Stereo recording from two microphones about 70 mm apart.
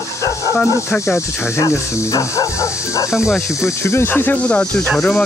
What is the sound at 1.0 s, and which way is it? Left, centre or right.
Speech, left.